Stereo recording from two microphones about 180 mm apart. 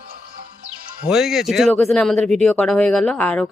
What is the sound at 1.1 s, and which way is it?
Speech, centre (ahead or behind).